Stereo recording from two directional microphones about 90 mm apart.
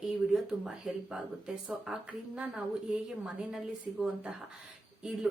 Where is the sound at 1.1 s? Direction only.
5° right (ahead or behind).